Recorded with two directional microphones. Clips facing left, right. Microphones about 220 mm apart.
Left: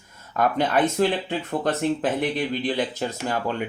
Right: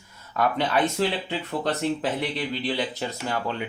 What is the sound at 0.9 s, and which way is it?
Speech, 50° left (ahead or behind).